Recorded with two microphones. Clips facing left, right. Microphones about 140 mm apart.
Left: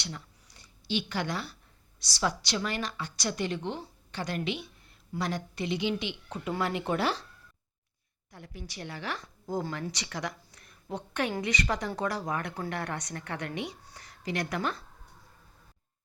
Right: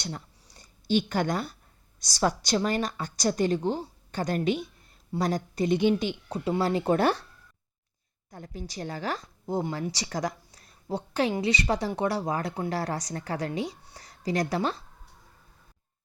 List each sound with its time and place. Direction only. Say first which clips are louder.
0.0 s a sound: right 4 dB; 40° right (ahead or behind)
2.0 s a woman's voice: right 5 dB; 45° right (ahead or behind)
8.3 s a woman's voice: right 5 dB; 40° right (ahead or behind)
9.5 s speech: right 4 dB; 25° right (ahead or behind)
9.9 s a woman's voice: right 5 dB; 35° right (ahead or behind)